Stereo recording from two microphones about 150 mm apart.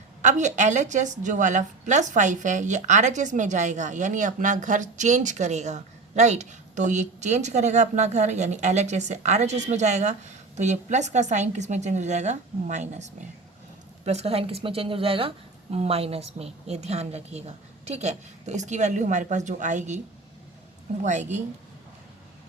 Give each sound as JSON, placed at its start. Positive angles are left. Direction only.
{"t": 0.2, "sound": "a woman's voice", "side_deg": -55}
{"t": 21.0, "sound": "a woman's voice", "side_deg": -50}